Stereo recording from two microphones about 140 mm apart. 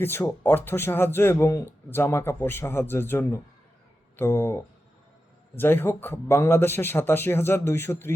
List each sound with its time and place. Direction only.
0.0 s speech: 15° left (ahead or behind)